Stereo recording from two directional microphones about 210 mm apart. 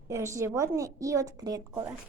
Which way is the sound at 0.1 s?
15° right (ahead or behind).